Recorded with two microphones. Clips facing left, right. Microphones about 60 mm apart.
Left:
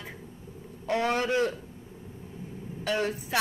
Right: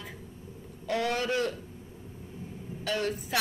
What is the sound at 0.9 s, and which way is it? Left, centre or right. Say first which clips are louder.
Speech: left 3 dB; left.